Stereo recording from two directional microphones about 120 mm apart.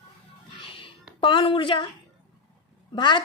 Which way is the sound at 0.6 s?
45° left (ahead or behind).